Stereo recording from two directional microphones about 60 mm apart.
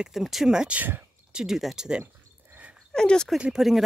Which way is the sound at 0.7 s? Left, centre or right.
Right.